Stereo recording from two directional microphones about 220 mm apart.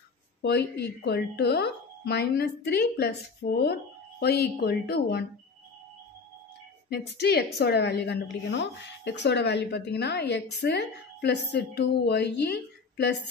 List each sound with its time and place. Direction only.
0.4 s speech: 50° left (ahead or behind)
6.9 s speech: 45° left (ahead or behind)